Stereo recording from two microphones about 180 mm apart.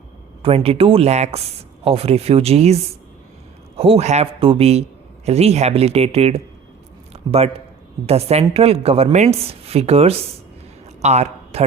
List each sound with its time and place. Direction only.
0.4 s a man's voice: 35° right (ahead or behind)
7.1 s a sound: 35° right (ahead or behind)
8.0 s a man's voice: 35° right (ahead or behind)